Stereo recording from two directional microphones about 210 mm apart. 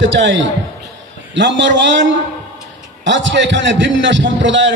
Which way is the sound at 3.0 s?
60° right (ahead or behind).